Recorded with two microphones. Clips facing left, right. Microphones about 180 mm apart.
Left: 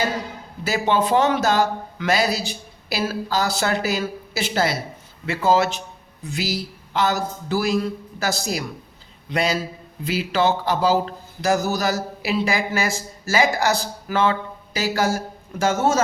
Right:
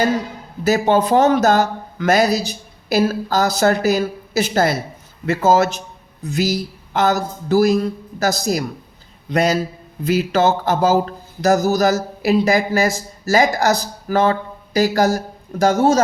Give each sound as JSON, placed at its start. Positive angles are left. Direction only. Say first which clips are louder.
{"t": 0.6, "sound": "speech", "louder": "right 5 dB", "side_deg": -45}